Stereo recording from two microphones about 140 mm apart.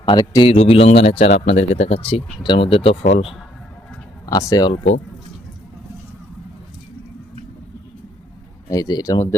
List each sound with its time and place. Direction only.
0.0 s a man's voice: 35° left (ahead or behind)
0.5 s speech: 45° left (ahead or behind)
2.9 s speech: 75° left (ahead or behind)
4.3 s speech: 25° left (ahead or behind)
4.7 s speech: 55° left (ahead or behind)
8.7 s speech: 25° left (ahead or behind)